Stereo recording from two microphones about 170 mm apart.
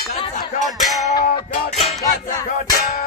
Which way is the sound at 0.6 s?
Centre (ahead or behind).